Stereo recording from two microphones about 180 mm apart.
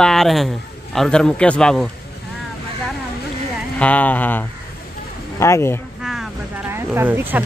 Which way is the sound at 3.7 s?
10° left (ahead or behind).